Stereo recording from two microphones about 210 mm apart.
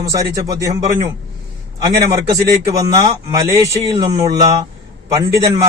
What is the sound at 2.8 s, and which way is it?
A man's voice, 15° right (ahead or behind).